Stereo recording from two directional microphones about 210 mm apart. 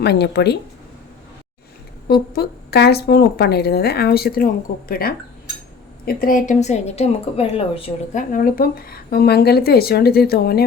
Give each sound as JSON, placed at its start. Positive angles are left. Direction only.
{"t": 0.0, "sound": "speech", "side_deg": 50}
{"t": 2.0, "sound": "a woman's voice", "side_deg": 50}
{"t": 8.3, "sound": "speech", "side_deg": 40}